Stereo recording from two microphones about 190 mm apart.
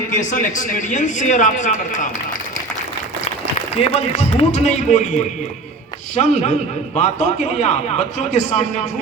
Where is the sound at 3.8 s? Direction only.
35° left (ahead or behind).